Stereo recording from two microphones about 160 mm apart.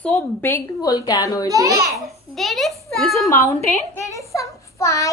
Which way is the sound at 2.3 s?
Centre (ahead or behind).